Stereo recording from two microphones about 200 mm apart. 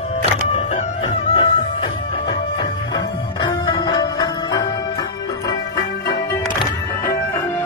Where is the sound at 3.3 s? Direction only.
20° left (ahead or behind).